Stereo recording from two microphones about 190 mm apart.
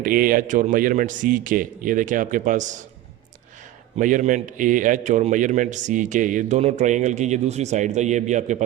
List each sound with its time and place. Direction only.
0.0 s a man's voice: 45° right (ahead or behind)
3.9 s a man's voice: 40° right (ahead or behind)